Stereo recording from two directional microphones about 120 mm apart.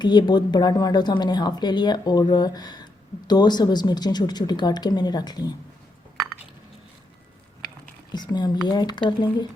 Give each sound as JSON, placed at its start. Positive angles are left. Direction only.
{"t": 0.0, "sound": "speech", "side_deg": 40}
{"t": 8.1, "sound": "speech", "side_deg": 35}